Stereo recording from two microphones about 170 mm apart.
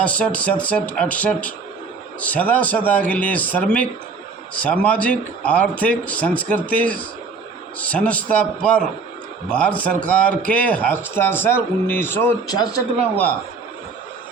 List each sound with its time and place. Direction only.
0.0 s speech: 5° left (ahead or behind)
12.5 s a man's voice: 25° left (ahead or behind)